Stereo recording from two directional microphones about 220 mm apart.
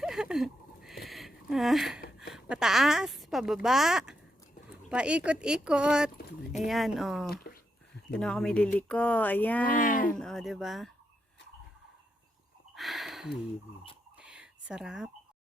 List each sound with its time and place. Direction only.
0.0 s a sound: 5° right (ahead or behind)
2.3 s a woman's voice: centre (ahead or behind)
7.3 s speech: 45° left (ahead or behind)
8.1 s a woman's voice: 5° left (ahead or behind)
9.6 s speech: 35° left (ahead or behind)
10.2 s a woman's voice: centre (ahead or behind)
12.7 s a sound: centre (ahead or behind)
14.7 s a woman's voice: 5° right (ahead or behind)